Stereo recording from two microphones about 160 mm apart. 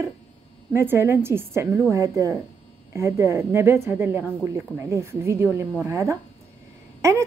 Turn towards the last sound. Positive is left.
turn(degrees=-20)  # may be behind; listen again after turning